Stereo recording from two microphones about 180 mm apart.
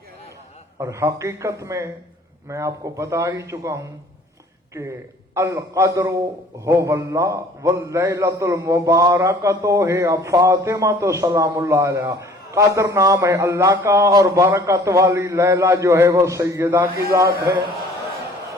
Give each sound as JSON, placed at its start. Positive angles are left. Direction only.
{"t": 0.8, "sound": "a man's voice", "side_deg": -15}
{"t": 5.3, "sound": "a man's voice", "side_deg": -15}
{"t": 17.2, "sound": "a man's voice", "side_deg": -60}